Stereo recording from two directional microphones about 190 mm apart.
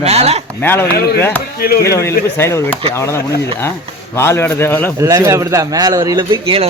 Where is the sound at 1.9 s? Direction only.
15° left (ahead or behind).